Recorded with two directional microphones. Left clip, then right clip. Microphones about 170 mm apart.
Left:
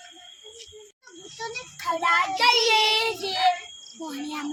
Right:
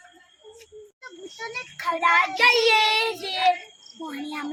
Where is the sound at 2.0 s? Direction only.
10° left (ahead or behind).